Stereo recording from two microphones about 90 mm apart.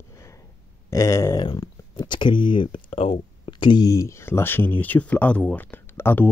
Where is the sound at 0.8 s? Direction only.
35° left (ahead or behind).